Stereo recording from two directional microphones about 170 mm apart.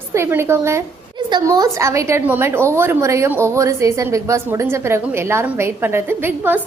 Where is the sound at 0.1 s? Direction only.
15° right (ahead or behind).